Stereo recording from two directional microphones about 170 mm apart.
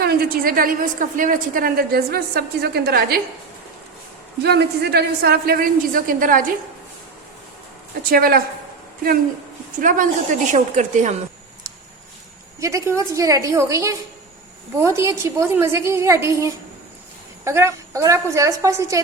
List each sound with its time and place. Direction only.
0.0 s a woman's voice: 60° right (ahead or behind)
4.4 s a woman's voice: 70° right (ahead or behind); by 6.4 s 55° right (ahead or behind)
8.1 s a woman's voice: 60° right (ahead or behind)
9.7 s a woman's voice: 50° right (ahead or behind)
12.5 s a woman's voice: 15° right (ahead or behind)